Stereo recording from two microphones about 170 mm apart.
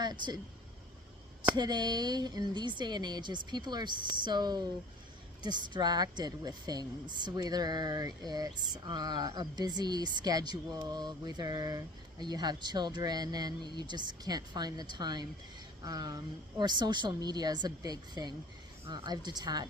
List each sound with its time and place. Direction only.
0.0 s speech: 25° right (ahead or behind)
1.5 s speech: 25° right (ahead or behind)